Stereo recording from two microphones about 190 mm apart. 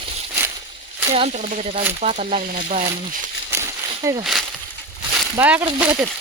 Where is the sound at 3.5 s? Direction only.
15° right (ahead or behind).